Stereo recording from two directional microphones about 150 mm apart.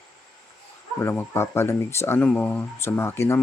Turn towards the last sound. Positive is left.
turn(degrees=15)  # may be behind; listen again after turning